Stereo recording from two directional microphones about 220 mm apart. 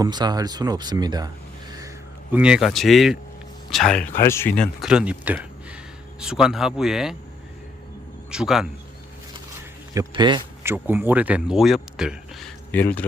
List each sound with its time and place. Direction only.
0.0 s speech: 20° right (ahead or behind)
2.3 s speech: 5° right (ahead or behind)
8.3 s speech: 5° right (ahead or behind)
9.9 s speech: 15° right (ahead or behind); by 12.8 s centre (ahead or behind)